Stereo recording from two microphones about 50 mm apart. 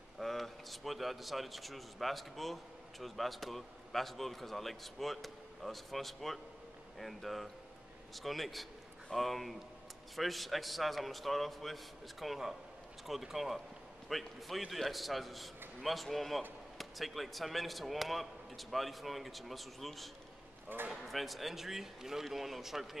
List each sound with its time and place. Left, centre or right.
0.2 s a man's voice: centre
20.6 s speech: right
20.9 s a man's voice: centre